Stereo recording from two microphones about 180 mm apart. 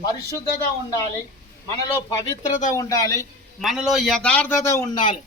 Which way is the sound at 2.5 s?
45° left (ahead or behind).